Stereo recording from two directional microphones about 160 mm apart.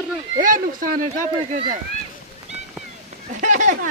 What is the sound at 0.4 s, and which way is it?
Speech, 60° right (ahead or behind).